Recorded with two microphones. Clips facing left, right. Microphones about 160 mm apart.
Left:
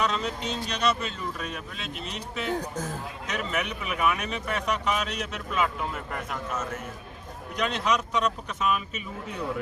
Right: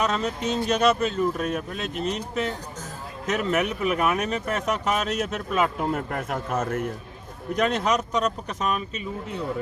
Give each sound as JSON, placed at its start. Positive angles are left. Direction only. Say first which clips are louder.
{"t": 0.0, "sound": "speech", "louder": "right 3 dB", "side_deg": -45}
{"t": 3.2, "sound": "speech", "louder": "right 7 dB", "side_deg": -45}
{"t": 7.5, "sound": "speech", "louder": "right 4 dB", "side_deg": -45}